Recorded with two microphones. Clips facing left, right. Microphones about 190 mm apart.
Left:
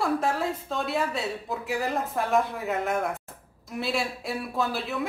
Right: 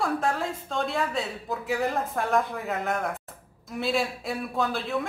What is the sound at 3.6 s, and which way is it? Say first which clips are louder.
A woman's voice: right 2 dB; centre (ahead or behind).